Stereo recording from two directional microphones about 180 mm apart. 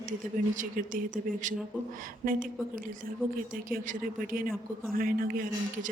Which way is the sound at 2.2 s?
50° right (ahead or behind).